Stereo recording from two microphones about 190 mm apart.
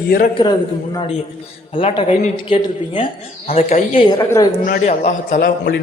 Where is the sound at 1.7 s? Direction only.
30° left (ahead or behind).